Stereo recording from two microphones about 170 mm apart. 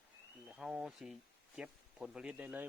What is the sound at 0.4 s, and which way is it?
Speech, 5° right (ahead or behind).